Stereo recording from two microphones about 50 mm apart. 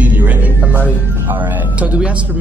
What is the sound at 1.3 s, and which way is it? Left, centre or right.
Speech, right.